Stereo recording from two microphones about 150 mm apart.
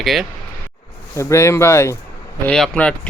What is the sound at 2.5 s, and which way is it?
Speech, 5° left (ahead or behind).